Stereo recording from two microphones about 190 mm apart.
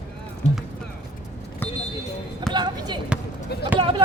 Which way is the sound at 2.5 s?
25° right (ahead or behind).